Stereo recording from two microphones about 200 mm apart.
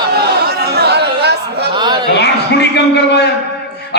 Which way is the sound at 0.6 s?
55° right (ahead or behind).